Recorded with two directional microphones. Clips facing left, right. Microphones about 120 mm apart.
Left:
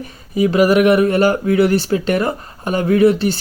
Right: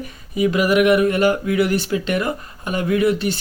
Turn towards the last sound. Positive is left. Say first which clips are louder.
# left 5 dB
turn(degrees=30)  # may be behind; listen again after turning